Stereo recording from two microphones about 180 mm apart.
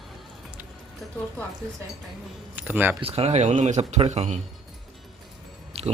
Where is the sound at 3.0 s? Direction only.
35° right (ahead or behind).